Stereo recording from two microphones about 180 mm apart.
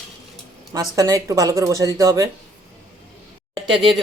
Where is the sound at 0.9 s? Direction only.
20° right (ahead or behind).